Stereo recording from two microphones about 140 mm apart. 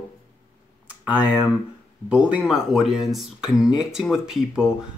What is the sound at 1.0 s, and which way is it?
Speech, 10° right (ahead or behind).